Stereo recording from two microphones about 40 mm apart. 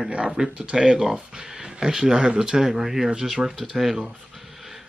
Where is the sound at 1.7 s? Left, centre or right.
Centre.